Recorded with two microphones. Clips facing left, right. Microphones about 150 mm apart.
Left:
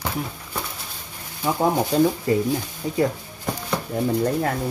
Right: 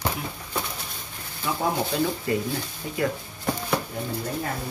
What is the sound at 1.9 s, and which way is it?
Speech, 35° left (ahead or behind).